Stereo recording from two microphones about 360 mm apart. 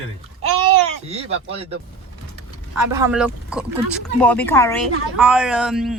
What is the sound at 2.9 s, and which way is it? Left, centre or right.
Speech, centre.